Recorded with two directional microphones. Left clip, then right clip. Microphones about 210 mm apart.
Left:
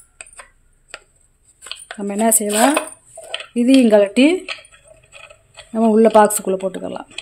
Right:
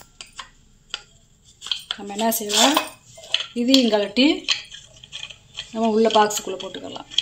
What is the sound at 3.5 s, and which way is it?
Speech, 55° left (ahead or behind).